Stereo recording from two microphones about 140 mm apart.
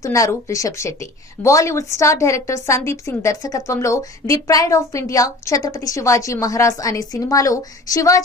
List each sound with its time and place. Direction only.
0.0 s a woman's voice: 20° left (ahead or behind)